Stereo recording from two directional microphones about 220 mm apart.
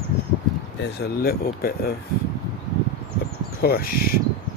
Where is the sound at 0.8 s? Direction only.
45° left (ahead or behind).